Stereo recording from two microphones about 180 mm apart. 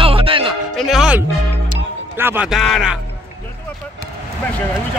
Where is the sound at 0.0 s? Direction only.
30° right (ahead or behind).